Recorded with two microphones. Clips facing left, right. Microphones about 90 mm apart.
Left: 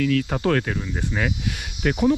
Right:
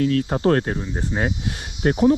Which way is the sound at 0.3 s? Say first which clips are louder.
Right 3 dB; 30° right (ahead or behind).